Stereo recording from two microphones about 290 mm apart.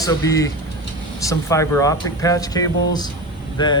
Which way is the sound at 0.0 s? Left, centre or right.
Centre.